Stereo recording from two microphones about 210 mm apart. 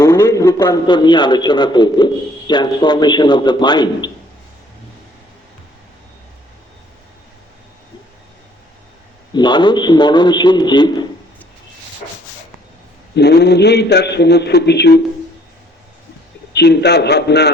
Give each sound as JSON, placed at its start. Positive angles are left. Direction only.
{"t": 0.0, "sound": "a man's voice", "side_deg": 20}
{"t": 9.3, "sound": "a man's voice", "side_deg": 20}
{"t": 13.1, "sound": "a man's voice", "side_deg": 50}
{"t": 16.5, "sound": "a man's voice", "side_deg": 50}